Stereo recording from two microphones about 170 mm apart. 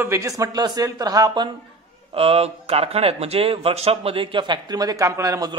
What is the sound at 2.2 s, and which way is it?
Speech, 35° right (ahead or behind).